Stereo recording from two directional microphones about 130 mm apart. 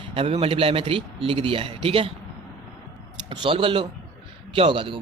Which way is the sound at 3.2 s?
40° right (ahead or behind).